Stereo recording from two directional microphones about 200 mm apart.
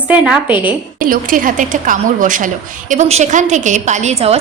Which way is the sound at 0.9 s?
45° right (ahead or behind).